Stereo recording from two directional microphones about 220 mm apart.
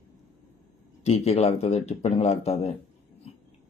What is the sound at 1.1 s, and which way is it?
Speech, 30° left (ahead or behind).